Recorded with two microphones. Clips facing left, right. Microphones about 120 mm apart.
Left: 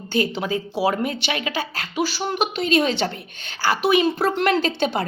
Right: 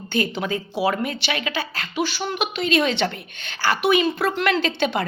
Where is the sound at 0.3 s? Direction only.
35° left (ahead or behind).